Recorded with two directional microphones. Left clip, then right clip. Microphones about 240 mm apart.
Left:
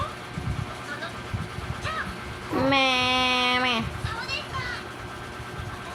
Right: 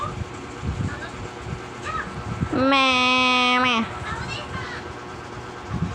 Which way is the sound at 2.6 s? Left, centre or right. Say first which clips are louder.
Right 4 dB; centre.